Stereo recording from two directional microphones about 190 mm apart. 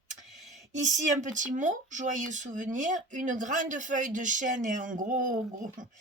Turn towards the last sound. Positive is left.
turn(degrees=-40)  # may be behind; listen again after turning